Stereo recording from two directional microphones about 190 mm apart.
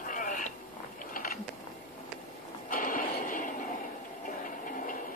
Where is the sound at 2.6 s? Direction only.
45° left (ahead or behind).